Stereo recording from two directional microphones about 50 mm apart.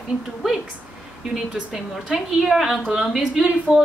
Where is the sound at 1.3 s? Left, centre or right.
Centre.